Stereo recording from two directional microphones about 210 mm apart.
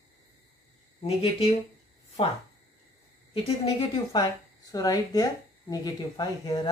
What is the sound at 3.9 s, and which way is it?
Speech, 20° left (ahead or behind).